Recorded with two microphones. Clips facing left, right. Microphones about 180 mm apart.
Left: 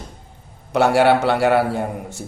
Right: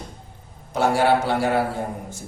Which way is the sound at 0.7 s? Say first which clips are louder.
Left 4 dB; 70° left (ahead or behind).